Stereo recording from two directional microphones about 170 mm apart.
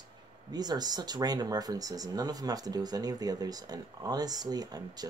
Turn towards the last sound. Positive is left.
turn(degrees=-20)  # may be behind; listen again after turning